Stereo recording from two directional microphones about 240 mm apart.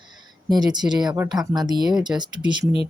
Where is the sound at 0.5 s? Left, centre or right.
Centre.